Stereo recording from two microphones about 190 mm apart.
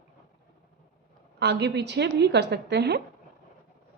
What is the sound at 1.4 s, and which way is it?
A woman's voice, 60° right (ahead or behind).